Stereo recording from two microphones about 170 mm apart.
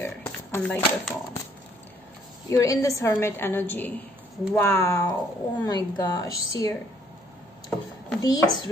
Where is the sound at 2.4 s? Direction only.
20° left (ahead or behind).